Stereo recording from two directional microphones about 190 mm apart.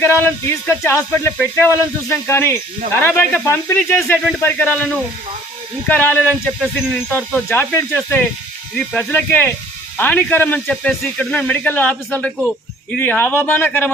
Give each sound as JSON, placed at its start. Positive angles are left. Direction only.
{"t": 0.0, "sound": "speech", "side_deg": 10}
{"t": 8.8, "sound": "speech", "side_deg": 5}